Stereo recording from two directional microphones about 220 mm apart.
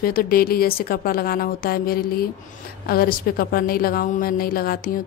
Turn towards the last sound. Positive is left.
turn(degrees=40)  # may be behind; listen again after turning